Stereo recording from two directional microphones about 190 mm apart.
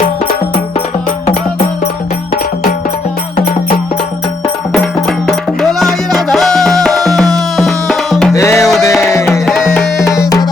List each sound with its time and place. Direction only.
4.7 s music: centre (ahead or behind)
8.3 s music: 15° left (ahead or behind)
8.5 s music: centre (ahead or behind)
10.1 s music: 15° left (ahead or behind)